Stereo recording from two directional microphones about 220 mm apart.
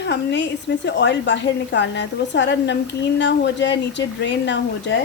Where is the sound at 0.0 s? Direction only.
50° left (ahead or behind).